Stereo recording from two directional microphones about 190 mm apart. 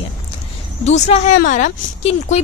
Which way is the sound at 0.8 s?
35° left (ahead or behind).